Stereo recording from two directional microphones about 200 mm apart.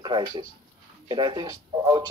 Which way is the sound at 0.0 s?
20° right (ahead or behind).